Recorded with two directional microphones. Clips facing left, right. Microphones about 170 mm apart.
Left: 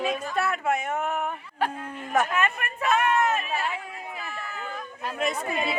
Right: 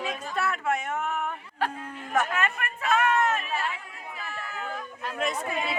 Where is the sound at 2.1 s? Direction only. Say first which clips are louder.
Left 2 dB; 15° left (ahead or behind).